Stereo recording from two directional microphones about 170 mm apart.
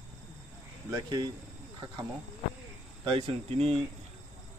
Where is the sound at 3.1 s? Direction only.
35° right (ahead or behind).